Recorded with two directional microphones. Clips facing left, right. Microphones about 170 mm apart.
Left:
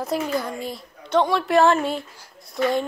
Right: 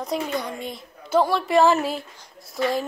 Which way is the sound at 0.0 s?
Centre (ahead or behind).